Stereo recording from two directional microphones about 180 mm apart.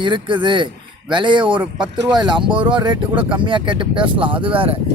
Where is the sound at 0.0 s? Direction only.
25° right (ahead or behind).